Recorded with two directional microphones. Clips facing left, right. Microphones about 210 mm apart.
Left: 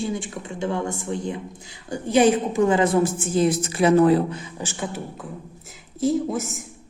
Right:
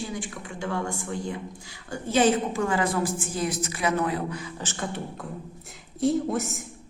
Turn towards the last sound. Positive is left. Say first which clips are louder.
# left 1 dB
turn(degrees=0)  # may be behind; listen again after turning